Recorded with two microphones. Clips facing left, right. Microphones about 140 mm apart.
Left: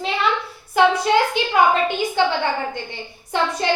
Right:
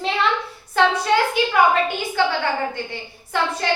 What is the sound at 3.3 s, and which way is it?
Speech, 20° left (ahead or behind).